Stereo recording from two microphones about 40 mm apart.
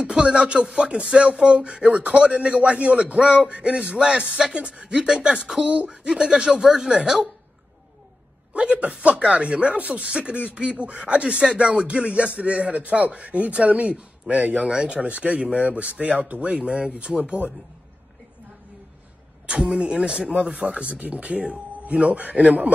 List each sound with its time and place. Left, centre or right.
0.0 s speech: right
8.5 s speech: right
19.6 s speech: centre; by 22.7 s right